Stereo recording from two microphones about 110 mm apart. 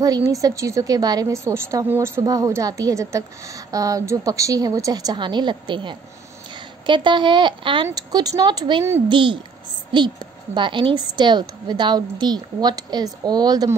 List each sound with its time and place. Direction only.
0.0 s a woman's voice: 35° right (ahead or behind)